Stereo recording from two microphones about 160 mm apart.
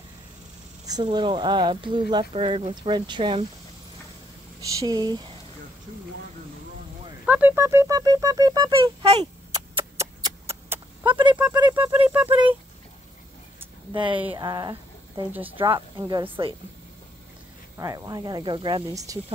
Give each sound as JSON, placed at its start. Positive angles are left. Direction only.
{"t": 0.8, "sound": "speech", "side_deg": -25}
{"t": 4.7, "sound": "speech", "side_deg": -25}
{"t": 7.2, "sound": "speech", "side_deg": -10}
{"t": 9.2, "sound": "a sound", "side_deg": -25}
{"t": 10.2, "sound": "vehicle", "side_deg": -15}
{"t": 11.1, "sound": "speech", "side_deg": -30}
{"t": 11.8, "sound": "speech", "side_deg": -10}
{"t": 13.9, "sound": "a woman's voice", "side_deg": -30}
{"t": 17.7, "sound": "speech", "side_deg": -20}